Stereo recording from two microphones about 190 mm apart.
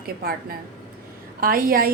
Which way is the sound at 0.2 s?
50° right (ahead or behind).